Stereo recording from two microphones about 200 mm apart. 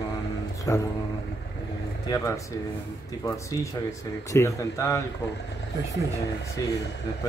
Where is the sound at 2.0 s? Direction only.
15° left (ahead or behind).